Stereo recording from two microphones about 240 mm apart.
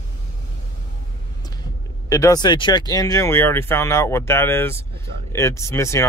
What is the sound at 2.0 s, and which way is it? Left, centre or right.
Speech, centre.